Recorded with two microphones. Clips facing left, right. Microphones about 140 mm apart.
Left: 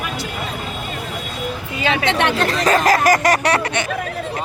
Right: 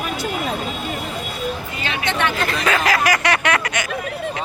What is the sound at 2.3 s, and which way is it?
Speech, 30° left (ahead or behind).